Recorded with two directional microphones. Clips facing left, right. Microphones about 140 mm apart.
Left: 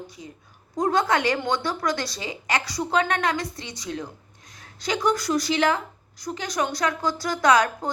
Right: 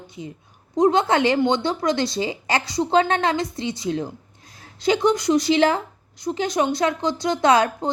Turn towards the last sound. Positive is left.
turn(degrees=-25)  # may be behind; listen again after turning